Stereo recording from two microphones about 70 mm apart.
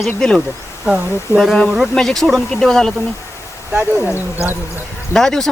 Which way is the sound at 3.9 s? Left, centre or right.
Left.